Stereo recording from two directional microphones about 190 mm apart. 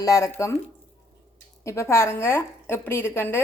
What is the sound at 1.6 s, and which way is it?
A woman's voice, 15° left (ahead or behind).